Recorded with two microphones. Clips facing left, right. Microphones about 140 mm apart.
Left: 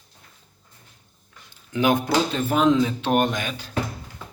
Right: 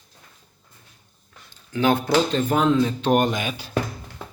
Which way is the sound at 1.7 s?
15° left (ahead or behind).